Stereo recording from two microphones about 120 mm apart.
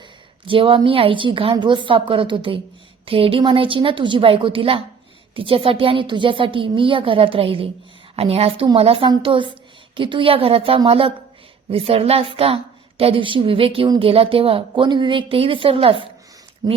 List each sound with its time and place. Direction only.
0.4 s a woman's voice: 45° right (ahead or behind)
16.6 s speech: 35° right (ahead or behind)